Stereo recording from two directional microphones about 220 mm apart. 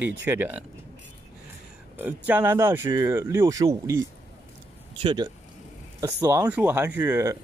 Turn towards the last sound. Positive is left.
turn(degrees=-15)  # may be behind; listen again after turning